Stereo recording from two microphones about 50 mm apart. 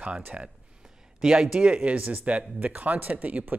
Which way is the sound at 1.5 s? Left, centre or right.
Right.